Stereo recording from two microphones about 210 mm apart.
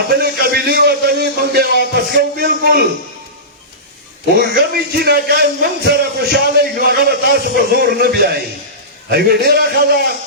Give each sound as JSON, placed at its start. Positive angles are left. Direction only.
{"t": 0.1, "sound": "music", "side_deg": -50}
{"t": 2.1, "sound": "a man's voice", "side_deg": -45}
{"t": 4.4, "sound": "a man's voice", "side_deg": -50}